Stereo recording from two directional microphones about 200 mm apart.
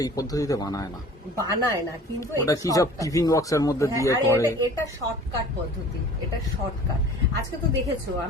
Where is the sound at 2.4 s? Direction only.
15° left (ahead or behind).